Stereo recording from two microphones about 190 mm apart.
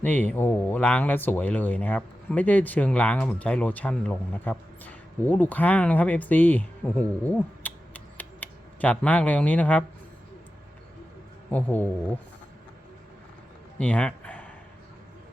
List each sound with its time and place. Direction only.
0.0 s speech: 10° left (ahead or behind)
11.5 s speech: 10° left (ahead or behind)
13.7 s a sound: 5° left (ahead or behind)